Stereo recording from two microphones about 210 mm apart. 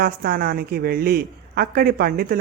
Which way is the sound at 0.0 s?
45° right (ahead or behind).